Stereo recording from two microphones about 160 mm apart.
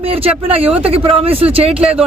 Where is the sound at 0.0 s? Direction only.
35° right (ahead or behind).